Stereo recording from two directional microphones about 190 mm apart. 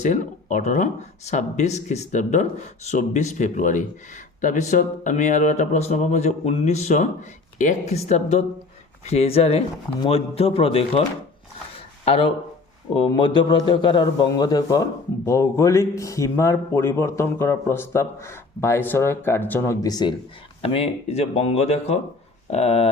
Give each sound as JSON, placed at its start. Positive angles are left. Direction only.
{"t": 0.0, "sound": "speech", "side_deg": 40}
{"t": 13.1, "sound": "a man's voice", "side_deg": 25}